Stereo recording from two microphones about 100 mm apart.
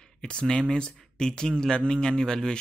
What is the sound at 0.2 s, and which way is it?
Speech, 10° left (ahead or behind).